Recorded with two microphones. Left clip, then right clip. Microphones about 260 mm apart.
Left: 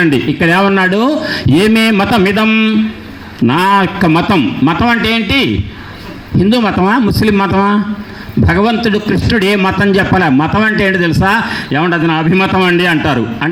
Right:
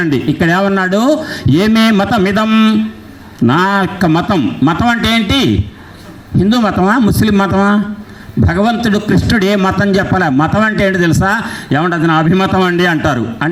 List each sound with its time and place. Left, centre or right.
0.0 s a man's voice: right
6.5 s a man's voice: right